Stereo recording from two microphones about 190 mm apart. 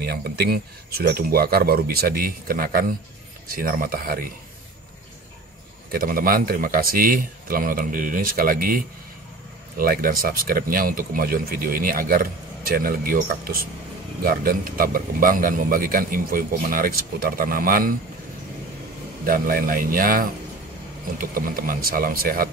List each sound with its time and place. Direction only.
0.0 s speech: 55° right (ahead or behind)
5.9 s speech: 50° right (ahead or behind)
19.2 s speech: 50° right (ahead or behind)